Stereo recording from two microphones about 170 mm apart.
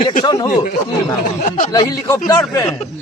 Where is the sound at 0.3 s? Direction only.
20° left (ahead or behind).